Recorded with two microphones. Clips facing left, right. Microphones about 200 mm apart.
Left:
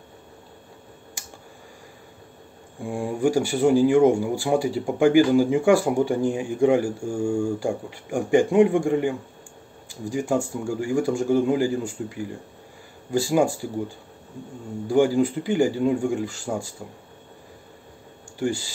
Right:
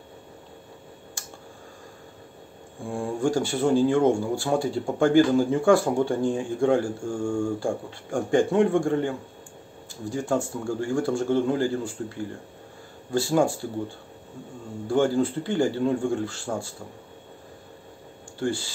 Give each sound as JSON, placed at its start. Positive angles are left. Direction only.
{"t": 2.8, "sound": "speech", "side_deg": 15}
{"t": 14.9, "sound": "speech", "side_deg": 15}